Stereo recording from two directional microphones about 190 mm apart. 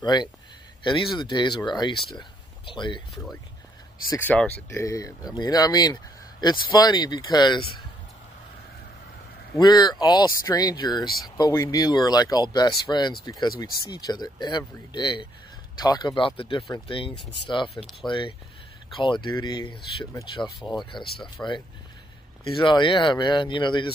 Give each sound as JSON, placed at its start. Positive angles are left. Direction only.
{"t": 0.0, "sound": "speech", "side_deg": 20}
{"t": 4.1, "sound": "speech", "side_deg": 10}
{"t": 9.6, "sound": "speech", "side_deg": 20}